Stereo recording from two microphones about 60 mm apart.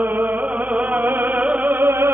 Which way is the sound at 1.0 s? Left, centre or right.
Right.